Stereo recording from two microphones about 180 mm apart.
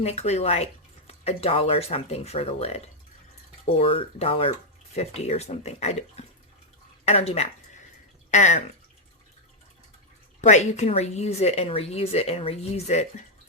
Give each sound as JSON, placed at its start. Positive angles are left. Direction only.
{"t": 0.0, "sound": "speech", "side_deg": 35}
{"t": 10.4, "sound": "speech", "side_deg": 40}